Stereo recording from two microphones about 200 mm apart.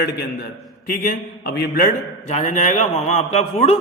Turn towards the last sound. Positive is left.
turn(degrees=30)  # may be behind; listen again after turning